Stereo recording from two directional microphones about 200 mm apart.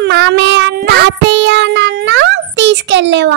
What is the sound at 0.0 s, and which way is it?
Child singing, 60° right (ahead or behind).